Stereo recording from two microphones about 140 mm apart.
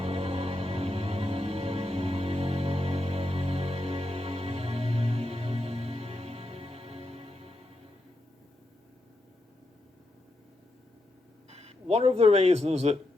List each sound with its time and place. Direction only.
0.0 s music: 45° right (ahead or behind)
11.4 s speech: 50° right (ahead or behind)